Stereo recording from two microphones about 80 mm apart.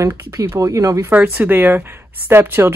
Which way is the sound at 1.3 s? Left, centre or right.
Right.